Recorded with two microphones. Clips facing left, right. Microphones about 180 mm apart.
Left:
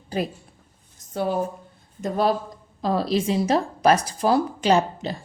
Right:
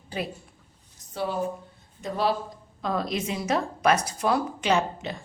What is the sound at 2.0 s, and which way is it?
Speech, 50° left (ahead or behind).